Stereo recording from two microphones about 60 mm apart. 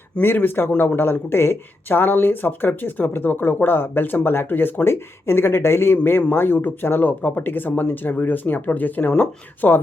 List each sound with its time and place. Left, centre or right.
0.2 s speech: left